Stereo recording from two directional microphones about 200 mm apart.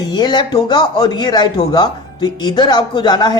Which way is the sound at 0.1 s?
20° left (ahead or behind).